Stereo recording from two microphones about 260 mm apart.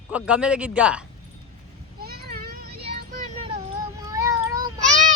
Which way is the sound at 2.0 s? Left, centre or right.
Right.